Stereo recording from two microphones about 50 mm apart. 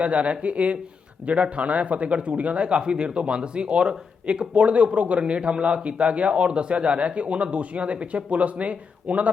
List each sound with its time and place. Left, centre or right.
0.0 s a man's voice: right